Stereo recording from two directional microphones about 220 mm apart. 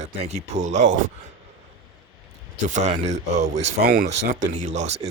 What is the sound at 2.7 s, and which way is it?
Speech, 30° right (ahead or behind).